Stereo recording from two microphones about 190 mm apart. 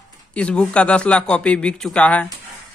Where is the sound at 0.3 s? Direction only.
5° left (ahead or behind).